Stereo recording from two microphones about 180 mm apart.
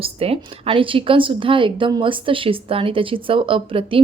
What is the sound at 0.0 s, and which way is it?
A woman's voice, 35° right (ahead or behind).